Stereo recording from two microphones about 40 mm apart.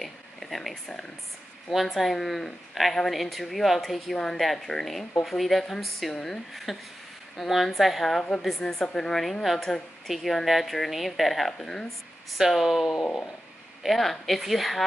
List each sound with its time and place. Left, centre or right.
0.0 s a sound: centre
2.0 s speech: centre
4.1 s speech: centre
6.1 s speech: centre
6.5 s speech: centre
9.2 s speech: centre
11.5 s speech: centre
12.4 s speech: centre
12.9 s speech: centre